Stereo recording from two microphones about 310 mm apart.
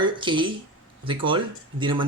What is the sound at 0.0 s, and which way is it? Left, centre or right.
Speech, centre.